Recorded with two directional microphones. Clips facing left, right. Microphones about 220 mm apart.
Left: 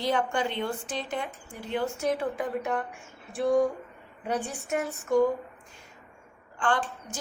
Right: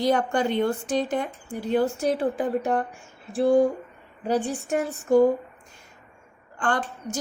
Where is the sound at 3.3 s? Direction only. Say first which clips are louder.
Right 5 dB; 30° right (ahead or behind).